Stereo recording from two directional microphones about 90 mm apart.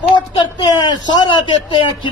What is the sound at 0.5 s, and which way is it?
Speech, 50° left (ahead or behind).